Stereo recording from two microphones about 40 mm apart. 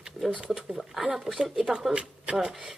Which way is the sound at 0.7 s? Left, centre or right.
Centre.